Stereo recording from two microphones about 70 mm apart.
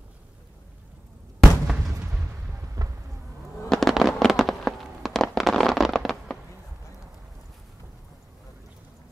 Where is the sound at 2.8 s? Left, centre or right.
Right.